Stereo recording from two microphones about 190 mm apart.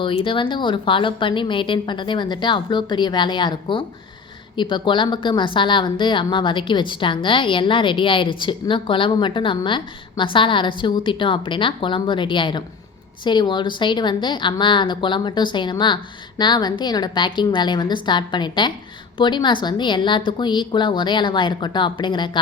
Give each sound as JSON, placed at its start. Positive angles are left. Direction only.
{"t": 0.0, "sound": "a woman's voice", "side_deg": 25}